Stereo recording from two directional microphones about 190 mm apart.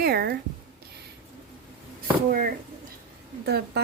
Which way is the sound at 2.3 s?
50° right (ahead or behind).